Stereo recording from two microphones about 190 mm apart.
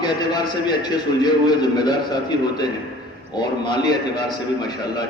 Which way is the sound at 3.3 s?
20° left (ahead or behind).